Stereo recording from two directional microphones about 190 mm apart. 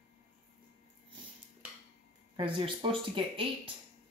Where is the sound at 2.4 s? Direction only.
25° right (ahead or behind).